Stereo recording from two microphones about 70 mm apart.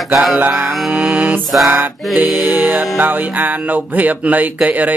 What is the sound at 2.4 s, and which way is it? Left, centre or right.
Music, right.